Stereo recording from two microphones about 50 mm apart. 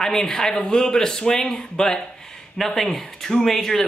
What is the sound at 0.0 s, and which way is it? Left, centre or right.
Speech, centre.